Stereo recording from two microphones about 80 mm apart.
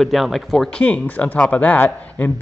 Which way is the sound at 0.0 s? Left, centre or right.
Centre.